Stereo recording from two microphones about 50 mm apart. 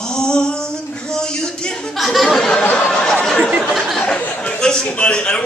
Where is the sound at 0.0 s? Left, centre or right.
Centre.